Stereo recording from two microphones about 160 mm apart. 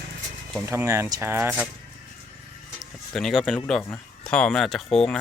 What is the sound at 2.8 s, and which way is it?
Speech, centre (ahead or behind).